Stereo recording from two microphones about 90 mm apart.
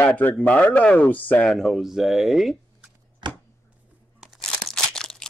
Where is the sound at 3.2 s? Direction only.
60° right (ahead or behind).